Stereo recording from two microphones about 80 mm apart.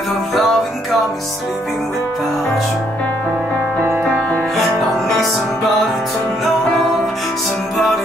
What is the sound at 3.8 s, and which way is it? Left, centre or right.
Music, right.